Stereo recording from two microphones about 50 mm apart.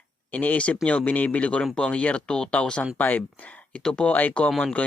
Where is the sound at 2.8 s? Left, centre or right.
Left.